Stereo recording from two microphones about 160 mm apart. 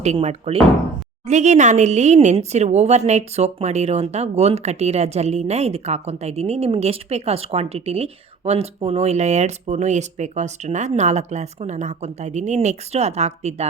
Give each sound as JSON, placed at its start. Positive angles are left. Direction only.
{"t": 0.0, "sound": "speech", "side_deg": -45}